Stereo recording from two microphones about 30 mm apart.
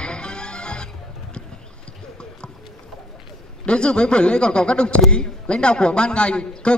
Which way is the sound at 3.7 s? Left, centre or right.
Left.